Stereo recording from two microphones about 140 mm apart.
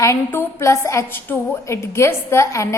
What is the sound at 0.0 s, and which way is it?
A woman's voice, 20° left (ahead or behind).